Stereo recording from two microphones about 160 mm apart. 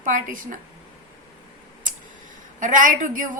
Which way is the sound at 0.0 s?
55° right (ahead or behind).